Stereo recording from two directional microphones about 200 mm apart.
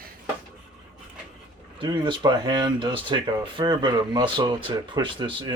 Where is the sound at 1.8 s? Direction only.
25° right (ahead or behind).